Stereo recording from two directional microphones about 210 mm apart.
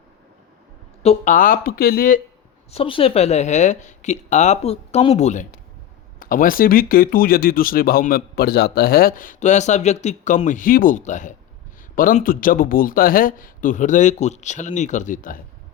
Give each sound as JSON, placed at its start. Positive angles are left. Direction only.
{"t": 1.0, "sound": "speech", "side_deg": 35}
{"t": 2.7, "sound": "speech", "side_deg": 25}